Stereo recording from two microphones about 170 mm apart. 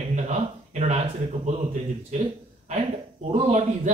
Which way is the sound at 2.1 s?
45° right (ahead or behind).